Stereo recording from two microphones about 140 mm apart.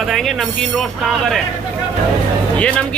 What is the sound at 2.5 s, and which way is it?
Speech, 10° left (ahead or behind).